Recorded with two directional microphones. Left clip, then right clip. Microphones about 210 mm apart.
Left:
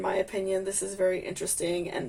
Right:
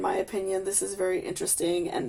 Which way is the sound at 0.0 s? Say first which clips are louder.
Right 1 dB; 35° right (ahead or behind).